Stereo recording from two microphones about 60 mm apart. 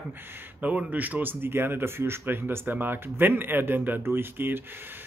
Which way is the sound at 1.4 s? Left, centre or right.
Right.